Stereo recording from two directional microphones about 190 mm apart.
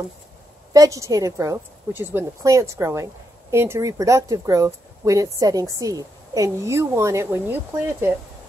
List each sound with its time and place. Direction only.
0.7 s a woman's voice: 15° right (ahead or behind)